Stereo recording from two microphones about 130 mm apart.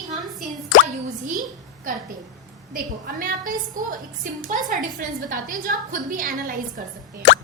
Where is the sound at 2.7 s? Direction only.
90° right.